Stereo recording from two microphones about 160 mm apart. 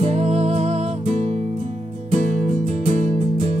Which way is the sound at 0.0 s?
40° right (ahead or behind).